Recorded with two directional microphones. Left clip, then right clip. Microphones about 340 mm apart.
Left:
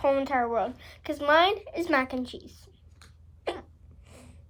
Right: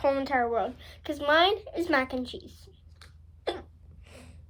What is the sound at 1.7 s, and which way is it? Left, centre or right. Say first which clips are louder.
Speech: even; centre.